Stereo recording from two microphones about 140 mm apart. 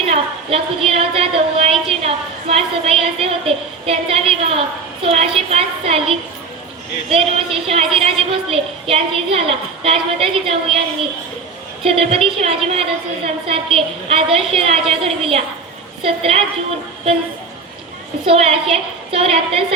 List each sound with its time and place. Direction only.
0.1 s a woman's voice: 45° right (ahead or behind)
18.3 s a woman's voice: 45° right (ahead or behind)